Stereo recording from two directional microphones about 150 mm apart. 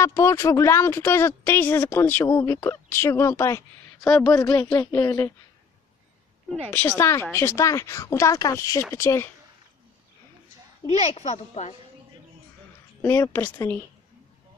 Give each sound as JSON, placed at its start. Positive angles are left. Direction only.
{"t": 0.0, "sound": "speech", "side_deg": 20}
{"t": 6.7, "sound": "speech", "side_deg": 15}
{"t": 10.9, "sound": "a woman's voice", "side_deg": 50}
{"t": 13.0, "sound": "speech", "side_deg": 20}